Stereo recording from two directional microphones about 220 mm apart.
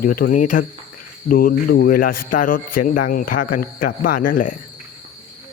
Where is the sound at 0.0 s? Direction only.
40° left (ahead or behind).